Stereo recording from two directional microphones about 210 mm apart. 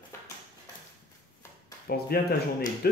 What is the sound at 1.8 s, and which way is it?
Speech, 45° left (ahead or behind).